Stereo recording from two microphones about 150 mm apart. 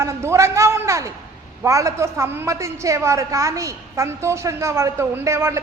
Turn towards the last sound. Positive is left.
turn(degrees=-20)  # may be behind; listen again after turning